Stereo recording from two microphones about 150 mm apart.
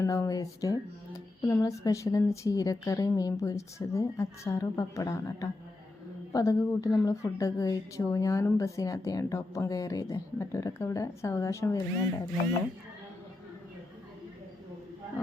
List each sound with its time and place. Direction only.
0.0 s a woman's voice: 20° left (ahead or behind)